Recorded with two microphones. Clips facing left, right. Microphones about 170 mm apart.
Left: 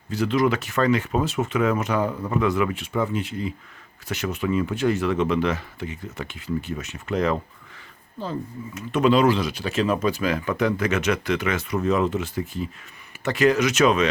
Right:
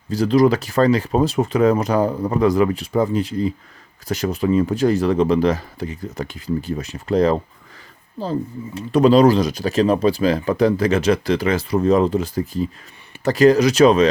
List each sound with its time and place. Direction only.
0.1 s speech: 35° right (ahead or behind)